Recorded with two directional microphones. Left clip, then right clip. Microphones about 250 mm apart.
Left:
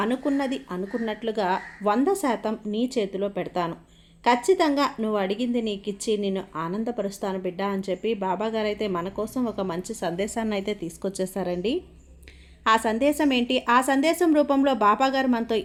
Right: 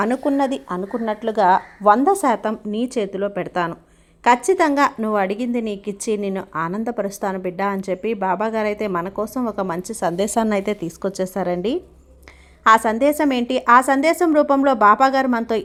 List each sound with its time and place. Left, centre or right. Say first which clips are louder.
0.0 s a woman's voice: right 6 dB; right